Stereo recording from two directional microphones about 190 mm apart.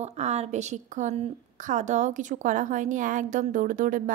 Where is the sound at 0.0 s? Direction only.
35° right (ahead or behind).